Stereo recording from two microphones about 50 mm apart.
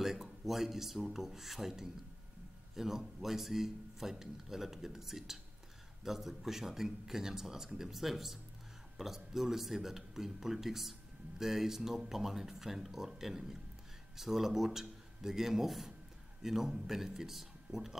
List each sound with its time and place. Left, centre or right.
0.0 s speech: centre